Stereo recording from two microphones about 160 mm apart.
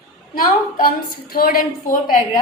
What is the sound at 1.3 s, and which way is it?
Speech, 65° left (ahead or behind).